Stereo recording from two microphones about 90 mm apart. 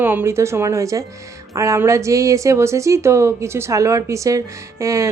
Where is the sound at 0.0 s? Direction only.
20° right (ahead or behind).